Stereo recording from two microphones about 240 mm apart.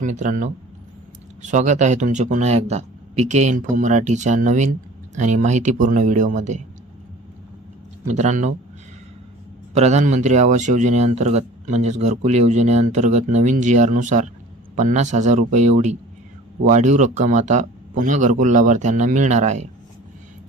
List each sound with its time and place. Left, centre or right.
0.0 s speech: right
8.0 s speech: right
9.7 s speech: right